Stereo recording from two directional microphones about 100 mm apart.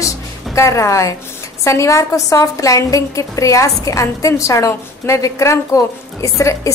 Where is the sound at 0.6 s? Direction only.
30° left (ahead or behind).